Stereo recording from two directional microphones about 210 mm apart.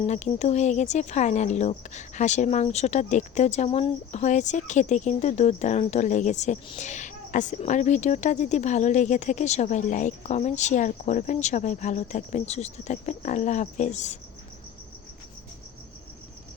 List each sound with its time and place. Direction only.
0.0 s speech: 30° left (ahead or behind)